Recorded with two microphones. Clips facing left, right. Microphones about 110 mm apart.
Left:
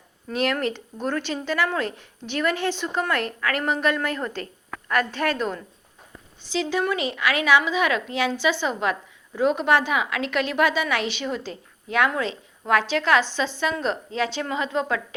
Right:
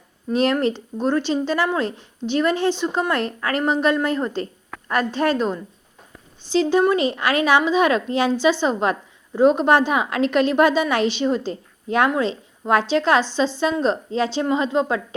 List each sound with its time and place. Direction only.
0.3 s speech: 25° right (ahead or behind)
6.5 s a woman's voice: 35° right (ahead or behind)